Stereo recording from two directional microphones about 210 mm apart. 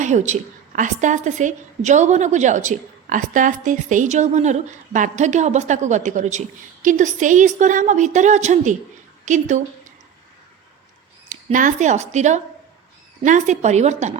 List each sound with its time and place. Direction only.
0.0 s a woman's voice: 35° right (ahead or behind)
11.3 s a woman's voice: 35° right (ahead or behind)